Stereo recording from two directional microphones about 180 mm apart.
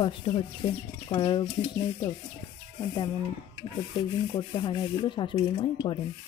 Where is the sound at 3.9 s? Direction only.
25° left (ahead or behind).